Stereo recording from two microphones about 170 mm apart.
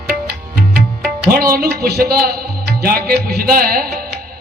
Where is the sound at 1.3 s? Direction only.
60° right (ahead or behind).